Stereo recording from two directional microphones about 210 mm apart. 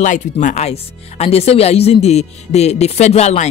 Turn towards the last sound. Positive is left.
turn(degrees=30)  # may be behind; listen again after turning